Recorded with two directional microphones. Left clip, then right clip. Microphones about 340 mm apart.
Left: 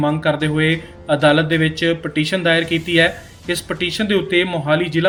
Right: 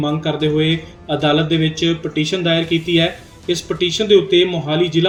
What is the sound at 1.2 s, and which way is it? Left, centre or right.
Speech, left.